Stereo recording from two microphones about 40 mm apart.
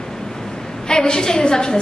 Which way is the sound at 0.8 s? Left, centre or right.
Centre.